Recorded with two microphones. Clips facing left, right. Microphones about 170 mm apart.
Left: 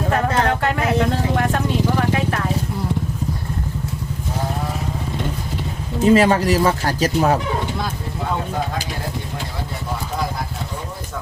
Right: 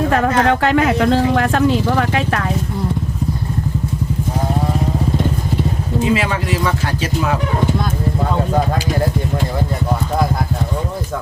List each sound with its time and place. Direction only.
0.1 s vehicle: 90° right
6.1 s speech: 40° left (ahead or behind)